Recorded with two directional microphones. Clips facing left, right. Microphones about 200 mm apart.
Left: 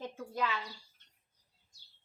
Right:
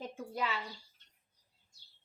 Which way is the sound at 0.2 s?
10° right (ahead or behind).